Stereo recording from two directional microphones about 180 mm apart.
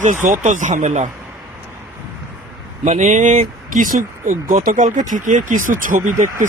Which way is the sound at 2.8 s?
45° right (ahead or behind).